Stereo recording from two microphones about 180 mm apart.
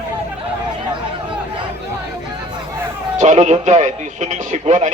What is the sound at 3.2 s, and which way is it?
Speech, 40° right (ahead or behind).